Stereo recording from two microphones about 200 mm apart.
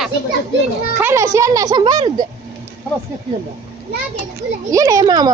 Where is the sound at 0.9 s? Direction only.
10° right (ahead or behind).